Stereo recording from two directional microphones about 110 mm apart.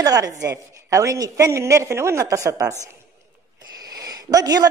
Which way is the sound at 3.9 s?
35° right (ahead or behind).